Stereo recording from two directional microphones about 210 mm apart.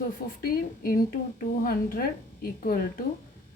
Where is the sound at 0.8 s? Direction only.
45° left (ahead or behind).